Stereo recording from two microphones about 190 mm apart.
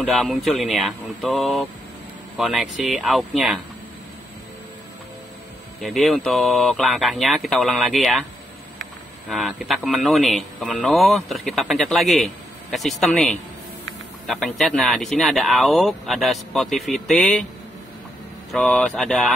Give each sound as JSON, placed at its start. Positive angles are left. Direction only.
{"t": 0.0, "sound": "speech", "side_deg": 0}
{"t": 5.8, "sound": "speech", "side_deg": 0}
{"t": 9.3, "sound": "speech", "side_deg": 0}
{"t": 18.5, "sound": "speech", "side_deg": 5}